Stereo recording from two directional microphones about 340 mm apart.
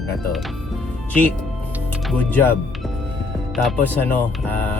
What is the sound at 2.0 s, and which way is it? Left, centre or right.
Speech, centre.